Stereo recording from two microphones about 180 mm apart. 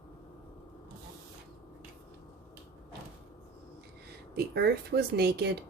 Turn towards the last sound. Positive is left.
turn(degrees=-65)  # may be behind; listen again after turning